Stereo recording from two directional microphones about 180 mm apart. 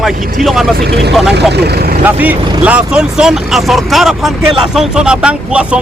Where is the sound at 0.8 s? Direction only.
65° right (ahead or behind).